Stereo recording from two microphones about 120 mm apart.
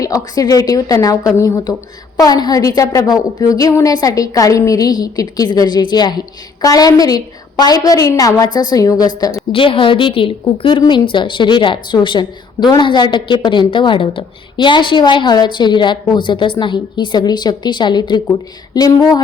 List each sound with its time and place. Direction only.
0.0 s a woman's voice: 30° left (ahead or behind)
9.5 s a woman's voice: 45° left (ahead or behind)